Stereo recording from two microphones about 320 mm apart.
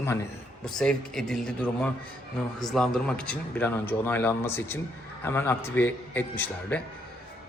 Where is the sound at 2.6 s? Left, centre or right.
Centre.